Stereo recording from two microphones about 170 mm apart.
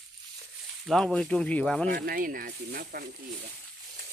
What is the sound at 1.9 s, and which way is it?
Speech, 60° right (ahead or behind).